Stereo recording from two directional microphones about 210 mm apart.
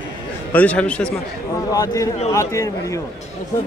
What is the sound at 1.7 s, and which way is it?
A man's voice, 15° left (ahead or behind).